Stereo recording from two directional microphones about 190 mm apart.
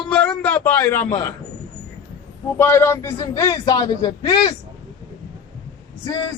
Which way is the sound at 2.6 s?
15° left (ahead or behind).